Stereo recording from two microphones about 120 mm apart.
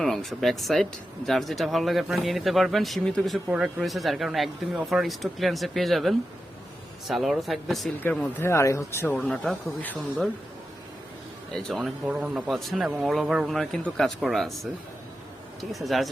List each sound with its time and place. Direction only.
0.0 s speech: centre (ahead or behind)
8.4 s speech: 25° left (ahead or behind)
9.1 s speech: 5° left (ahead or behind)
11.5 s speech: centre (ahead or behind)
15.7 s speech: centre (ahead or behind)